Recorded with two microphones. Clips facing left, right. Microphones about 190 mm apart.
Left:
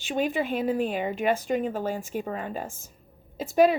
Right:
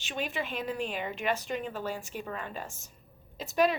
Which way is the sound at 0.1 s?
50° left (ahead or behind).